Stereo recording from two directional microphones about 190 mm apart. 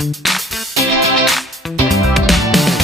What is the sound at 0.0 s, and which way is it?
Music, centre (ahead or behind).